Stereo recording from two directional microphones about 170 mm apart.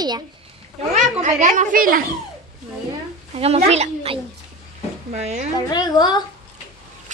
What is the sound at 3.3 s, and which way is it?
Speech, 35° right (ahead or behind).